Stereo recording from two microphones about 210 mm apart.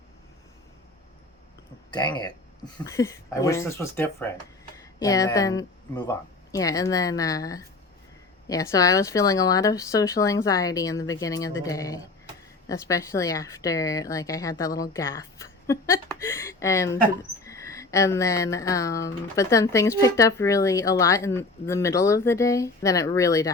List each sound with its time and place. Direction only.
1.9 s speech: 20° left (ahead or behind)
16.2 s a sound: 15° left (ahead or behind)
17.4 s speech: 15° left (ahead or behind)